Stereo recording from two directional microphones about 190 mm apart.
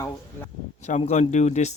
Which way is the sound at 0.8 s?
35° left (ahead or behind).